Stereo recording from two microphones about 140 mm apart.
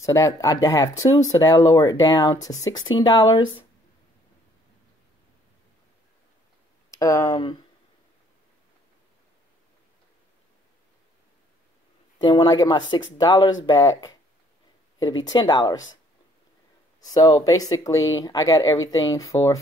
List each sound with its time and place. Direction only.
0.0 s speech: 20° left (ahead or behind); by 3.6 s 35° left (ahead or behind)
7.0 s speech: 20° left (ahead or behind)
12.2 s speech: 35° left (ahead or behind)
17.0 s speech: 25° left (ahead or behind)